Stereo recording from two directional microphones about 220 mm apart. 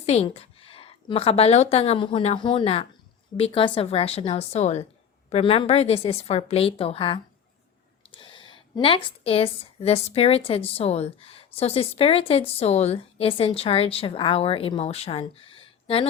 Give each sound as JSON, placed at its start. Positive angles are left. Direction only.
{"t": 0.0, "sound": "a woman's voice", "side_deg": 30}